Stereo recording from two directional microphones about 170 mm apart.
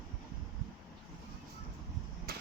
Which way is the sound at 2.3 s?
70° right (ahead or behind).